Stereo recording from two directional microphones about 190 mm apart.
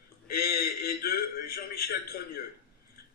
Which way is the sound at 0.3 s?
55° left (ahead or behind).